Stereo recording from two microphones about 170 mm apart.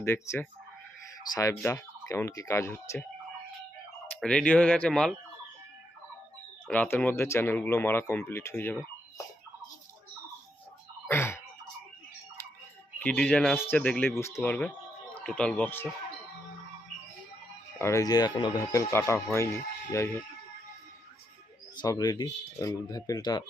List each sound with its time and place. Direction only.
0.0 s speech: 15° left (ahead or behind)
4.1 s speech: 5° left (ahead or behind)
6.7 s speech: 10° left (ahead or behind)
11.1 s a sound: 15° left (ahead or behind)
13.0 s speech: 5° left (ahead or behind)
17.7 s speech: 15° left (ahead or behind)
21.8 s speech: 25° left (ahead or behind)